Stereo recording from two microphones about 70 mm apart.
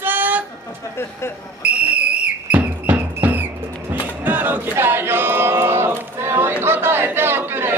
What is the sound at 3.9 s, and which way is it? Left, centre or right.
Music, right.